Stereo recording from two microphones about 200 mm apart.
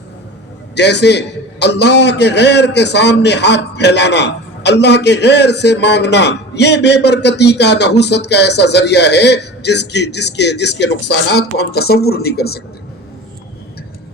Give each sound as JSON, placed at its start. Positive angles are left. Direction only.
{"t": 0.8, "sound": "a man's voice", "side_deg": 60}